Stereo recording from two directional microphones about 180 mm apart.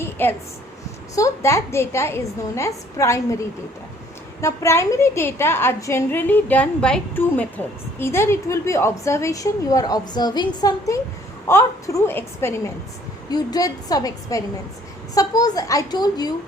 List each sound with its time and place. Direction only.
0.0 s a sound: 10° left (ahead or behind)
1.1 s a woman's voice: 15° left (ahead or behind)
4.4 s a woman's voice: 15° left (ahead or behind)